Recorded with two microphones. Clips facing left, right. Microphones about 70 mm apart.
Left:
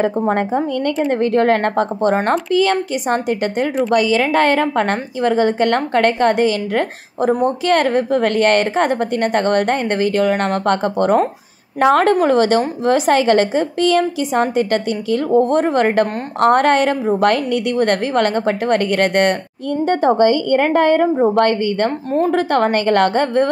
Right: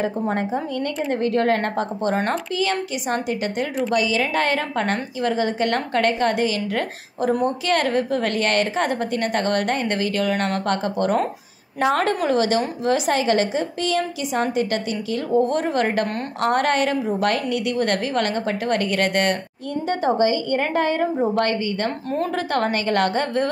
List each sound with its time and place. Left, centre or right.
0.0 s a woman's voice: left